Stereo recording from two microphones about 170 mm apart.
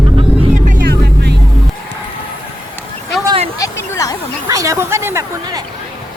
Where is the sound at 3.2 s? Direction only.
35° right (ahead or behind).